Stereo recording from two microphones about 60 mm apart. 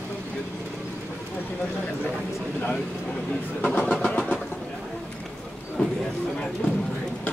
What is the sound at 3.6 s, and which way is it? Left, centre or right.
Vehicle, centre.